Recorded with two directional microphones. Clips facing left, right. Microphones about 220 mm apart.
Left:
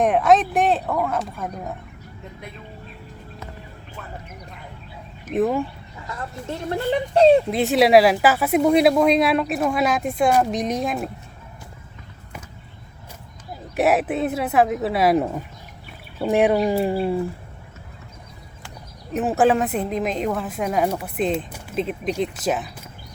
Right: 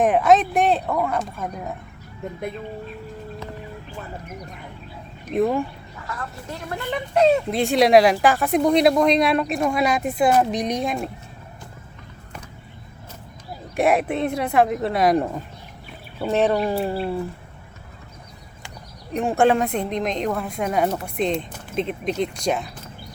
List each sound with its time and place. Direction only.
0.0 s speech: centre (ahead or behind)
5.2 s speech: centre (ahead or behind)
6.1 s speech: 25° left (ahead or behind)
7.5 s speech: 5° left (ahead or behind)
13.7 s speech: 5° left (ahead or behind)
19.1 s speech: 5° left (ahead or behind)